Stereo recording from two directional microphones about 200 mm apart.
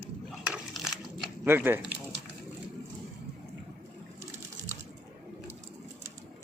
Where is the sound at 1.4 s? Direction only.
10° right (ahead or behind).